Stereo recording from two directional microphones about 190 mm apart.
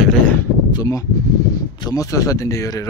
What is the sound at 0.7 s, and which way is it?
Speech, 20° left (ahead or behind).